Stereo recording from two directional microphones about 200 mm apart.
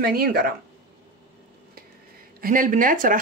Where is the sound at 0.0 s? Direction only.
50° right (ahead or behind).